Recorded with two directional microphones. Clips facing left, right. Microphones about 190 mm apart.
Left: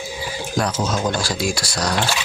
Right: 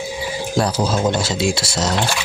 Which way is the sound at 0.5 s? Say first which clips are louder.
Right 3 dB; 35° right (ahead or behind).